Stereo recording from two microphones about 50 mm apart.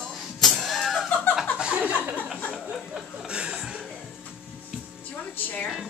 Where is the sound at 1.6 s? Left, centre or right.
Right.